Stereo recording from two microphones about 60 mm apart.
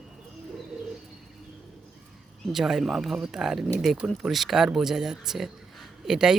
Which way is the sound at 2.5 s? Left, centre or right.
Centre.